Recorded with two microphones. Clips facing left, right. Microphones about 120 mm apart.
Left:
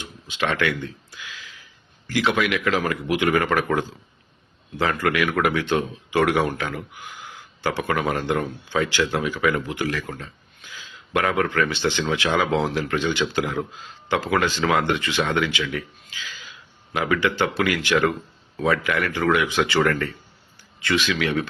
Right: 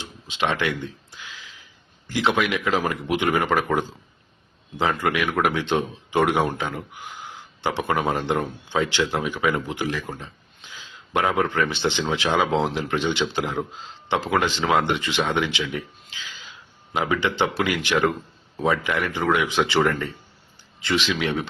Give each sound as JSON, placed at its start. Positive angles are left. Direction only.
{"t": 0.3, "sound": "speech", "side_deg": -20}
{"t": 4.8, "sound": "speech", "side_deg": -20}